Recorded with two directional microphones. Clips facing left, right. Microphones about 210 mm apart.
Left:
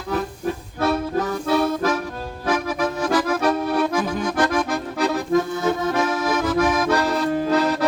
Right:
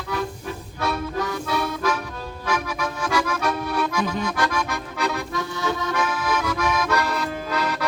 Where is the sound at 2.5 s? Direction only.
50° left (ahead or behind).